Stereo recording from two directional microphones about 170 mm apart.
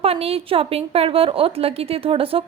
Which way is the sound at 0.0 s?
35° right (ahead or behind).